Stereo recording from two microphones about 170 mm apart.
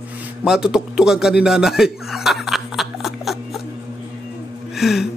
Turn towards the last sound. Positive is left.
turn(degrees=0)  # may be behind; listen again after turning